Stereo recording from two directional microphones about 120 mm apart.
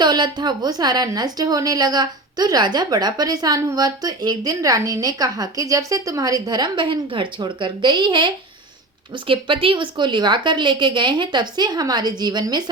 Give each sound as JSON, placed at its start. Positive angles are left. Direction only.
{"t": 0.0, "sound": "a woman's voice", "side_deg": -40}